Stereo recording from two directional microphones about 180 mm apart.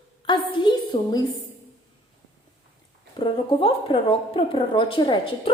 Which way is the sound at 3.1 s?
30° left (ahead or behind).